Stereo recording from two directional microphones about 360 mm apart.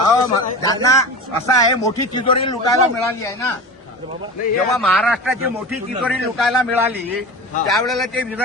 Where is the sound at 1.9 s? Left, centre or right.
Centre.